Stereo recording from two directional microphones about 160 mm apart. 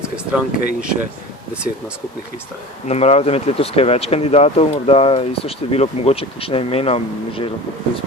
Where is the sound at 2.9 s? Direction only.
40° left (ahead or behind).